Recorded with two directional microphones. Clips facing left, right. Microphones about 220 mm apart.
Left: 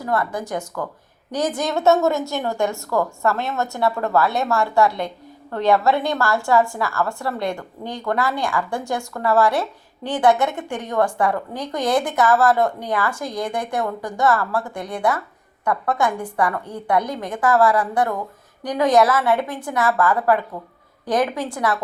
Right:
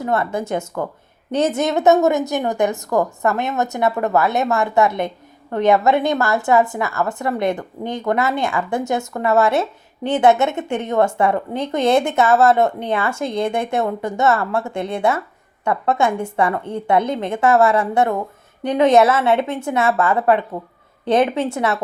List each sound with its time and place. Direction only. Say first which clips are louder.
0.0 s a woman's voice: right 3 dB; 25° right (ahead or behind)